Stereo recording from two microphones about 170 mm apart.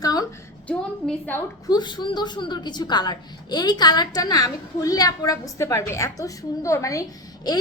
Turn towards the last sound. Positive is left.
turn(degrees=20)  # may be behind; listen again after turning